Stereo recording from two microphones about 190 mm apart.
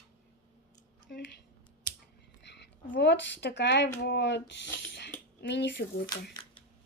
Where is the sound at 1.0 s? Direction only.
65° left (ahead or behind).